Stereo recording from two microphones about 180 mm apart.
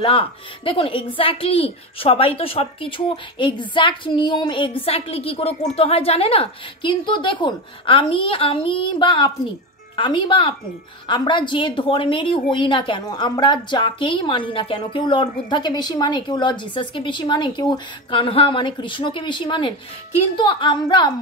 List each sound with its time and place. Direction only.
0.0 s a woman's voice: 30° left (ahead or behind)